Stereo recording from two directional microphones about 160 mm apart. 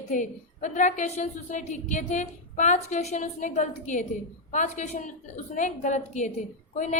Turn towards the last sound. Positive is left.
turn(degrees=50)  # may be behind; listen again after turning